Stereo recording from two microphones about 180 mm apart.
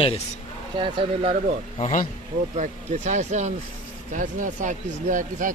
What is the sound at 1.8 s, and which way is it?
Speech, 40° left (ahead or behind).